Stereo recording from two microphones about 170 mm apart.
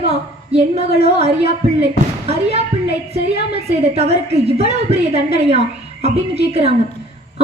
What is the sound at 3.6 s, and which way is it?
A woman's voice, 35° right (ahead or behind).